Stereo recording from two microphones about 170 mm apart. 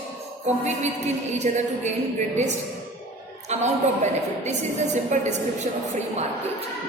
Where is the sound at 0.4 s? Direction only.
40° right (ahead or behind).